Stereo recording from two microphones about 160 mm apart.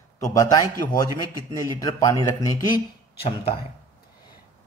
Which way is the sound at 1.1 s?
20° right (ahead or behind).